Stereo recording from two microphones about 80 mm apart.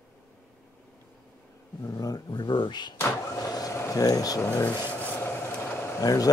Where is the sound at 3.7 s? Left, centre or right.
Left.